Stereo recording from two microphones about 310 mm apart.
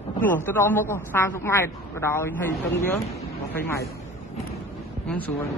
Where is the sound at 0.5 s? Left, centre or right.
Centre.